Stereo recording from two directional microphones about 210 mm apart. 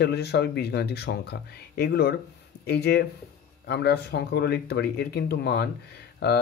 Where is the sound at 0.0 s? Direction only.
50° left (ahead or behind).